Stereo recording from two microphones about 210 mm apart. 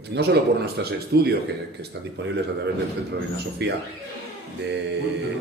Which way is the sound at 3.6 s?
55° right (ahead or behind).